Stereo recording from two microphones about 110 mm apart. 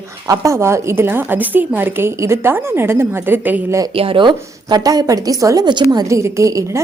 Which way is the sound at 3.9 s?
55° right (ahead or behind).